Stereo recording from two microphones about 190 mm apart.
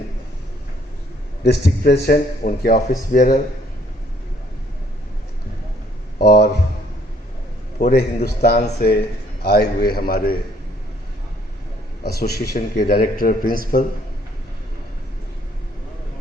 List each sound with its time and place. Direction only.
1.5 s a man's voice: 55° left (ahead or behind)
6.1 s a sound: 55° left (ahead or behind)
7.8 s a man's voice: 50° left (ahead or behind)
12.2 s a man's voice: 55° left (ahead or behind)